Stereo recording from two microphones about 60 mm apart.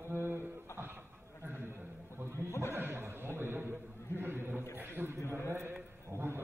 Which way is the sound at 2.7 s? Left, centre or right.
Right.